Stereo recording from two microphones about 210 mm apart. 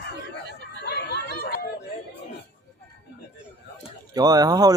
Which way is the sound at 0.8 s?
50° left (ahead or behind).